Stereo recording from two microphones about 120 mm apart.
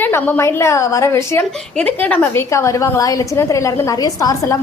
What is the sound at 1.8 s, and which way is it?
A woman's voice, 10° left (ahead or behind).